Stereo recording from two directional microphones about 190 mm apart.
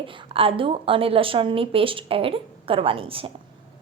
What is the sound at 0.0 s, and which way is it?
Speech, 25° right (ahead or behind).